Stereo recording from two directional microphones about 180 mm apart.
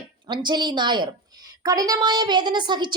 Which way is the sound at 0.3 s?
25° right (ahead or behind).